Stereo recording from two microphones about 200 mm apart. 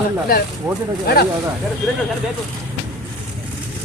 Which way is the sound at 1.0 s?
50° left (ahead or behind).